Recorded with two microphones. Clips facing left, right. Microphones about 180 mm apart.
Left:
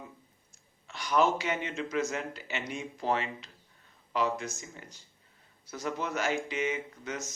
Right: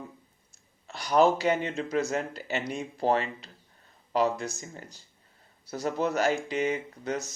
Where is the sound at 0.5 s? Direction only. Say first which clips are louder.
Right 3 dB; 35° right (ahead or behind).